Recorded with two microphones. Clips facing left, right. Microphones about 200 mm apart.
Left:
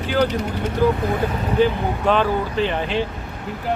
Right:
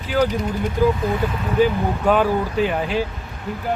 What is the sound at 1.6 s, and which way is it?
Speech, 10° right (ahead or behind).